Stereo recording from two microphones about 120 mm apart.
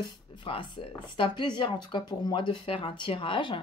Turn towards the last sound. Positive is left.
turn(degrees=45)  # may be behind; listen again after turning